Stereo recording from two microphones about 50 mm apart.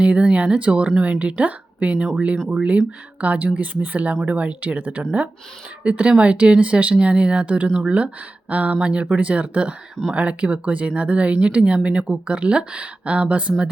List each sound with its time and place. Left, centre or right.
0.0 s speech: right